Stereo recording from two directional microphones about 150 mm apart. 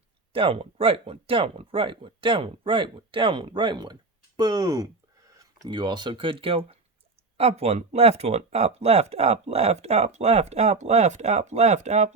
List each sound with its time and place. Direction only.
0.3 s speech: 35° right (ahead or behind)